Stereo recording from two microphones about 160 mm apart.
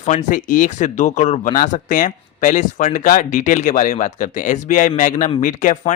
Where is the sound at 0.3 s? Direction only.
55° left (ahead or behind).